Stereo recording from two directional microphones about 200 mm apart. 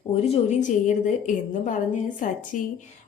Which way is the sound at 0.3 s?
35° left (ahead or behind).